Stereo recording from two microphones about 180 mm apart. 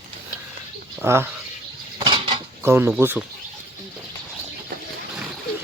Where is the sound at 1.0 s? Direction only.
15° right (ahead or behind).